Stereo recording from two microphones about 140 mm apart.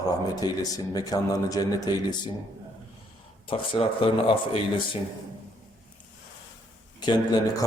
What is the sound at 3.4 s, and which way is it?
Speech, 40° left (ahead or behind).